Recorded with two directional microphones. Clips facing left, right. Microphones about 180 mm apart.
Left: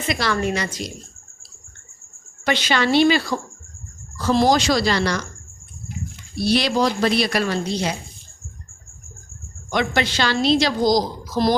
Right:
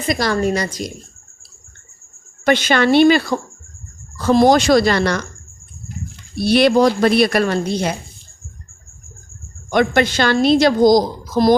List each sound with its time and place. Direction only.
0.1 s a woman's voice: 40° right (ahead or behind)
2.4 s a woman's voice: 50° right (ahead or behind)
6.4 s a woman's voice: 55° right (ahead or behind)
9.6 s a woman's voice: 50° right (ahead or behind)